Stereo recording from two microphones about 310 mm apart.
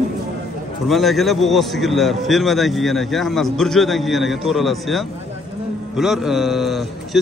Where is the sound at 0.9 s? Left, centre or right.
Centre.